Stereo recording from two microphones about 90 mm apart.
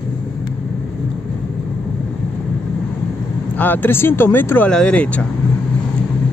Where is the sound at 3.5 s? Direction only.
20° left (ahead or behind).